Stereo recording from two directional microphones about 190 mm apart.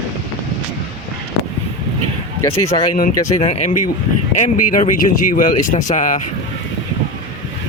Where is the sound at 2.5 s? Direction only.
30° left (ahead or behind).